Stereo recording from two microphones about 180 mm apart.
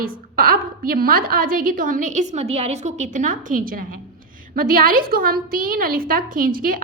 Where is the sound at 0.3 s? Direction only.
55° right (ahead or behind).